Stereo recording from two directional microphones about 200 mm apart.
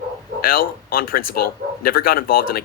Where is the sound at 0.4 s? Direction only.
45° left (ahead or behind).